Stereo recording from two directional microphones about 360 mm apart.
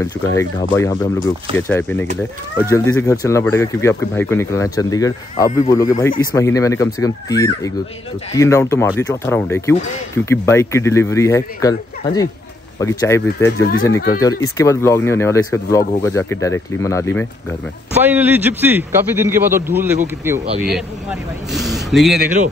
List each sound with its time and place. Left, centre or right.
0.0 s a man's voice: centre
13.9 s speech: left
14.6 s speech: centre
18.0 s a man's voice: centre